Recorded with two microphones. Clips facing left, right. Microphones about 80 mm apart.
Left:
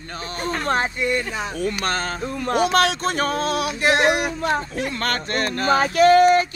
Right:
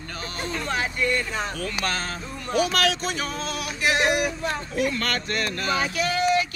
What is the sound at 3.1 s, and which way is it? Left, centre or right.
Male singing, left.